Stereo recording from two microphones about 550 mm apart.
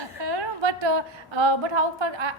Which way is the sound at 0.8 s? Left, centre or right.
Right.